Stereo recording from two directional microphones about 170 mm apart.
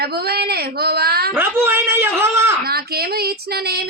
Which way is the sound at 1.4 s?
15° right (ahead or behind).